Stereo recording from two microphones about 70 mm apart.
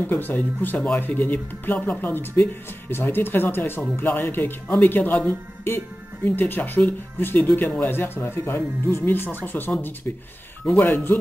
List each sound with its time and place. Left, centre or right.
0.0 s speech: left